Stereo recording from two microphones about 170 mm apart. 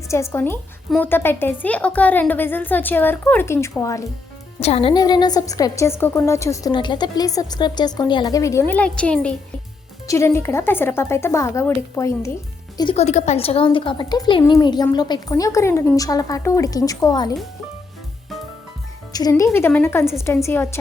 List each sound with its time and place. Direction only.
0.1 s speech: 15° left (ahead or behind)
4.6 s a woman's voice: 35° left (ahead or behind)
19.1 s a woman's voice: 20° left (ahead or behind)